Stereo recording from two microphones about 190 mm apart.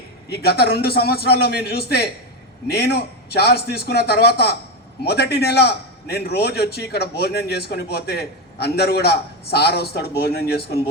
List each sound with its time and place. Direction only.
0.3 s a man's voice: 55° left (ahead or behind)